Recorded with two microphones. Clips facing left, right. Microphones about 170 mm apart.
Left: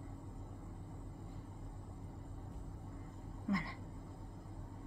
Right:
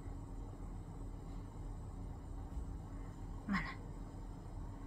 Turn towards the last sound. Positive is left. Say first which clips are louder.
# left 3 dB
turn(degrees=20)  # may be behind; listen again after turning